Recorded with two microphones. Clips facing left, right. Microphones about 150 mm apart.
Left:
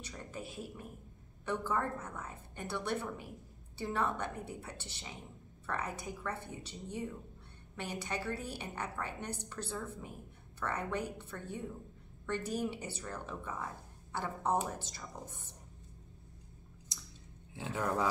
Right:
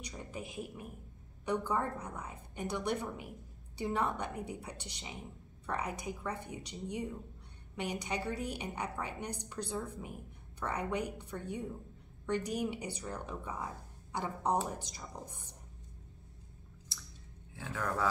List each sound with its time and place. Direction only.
0.0 s a woman's voice: 15° right (ahead or behind)
16.9 s squish: 15° left (ahead or behind)
17.6 s speech: 15° left (ahead or behind)